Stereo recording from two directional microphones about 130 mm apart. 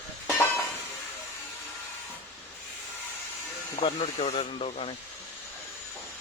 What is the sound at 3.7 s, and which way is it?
Speech, 45° left (ahead or behind).